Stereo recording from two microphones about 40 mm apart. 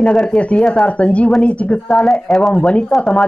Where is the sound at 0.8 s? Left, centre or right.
Left.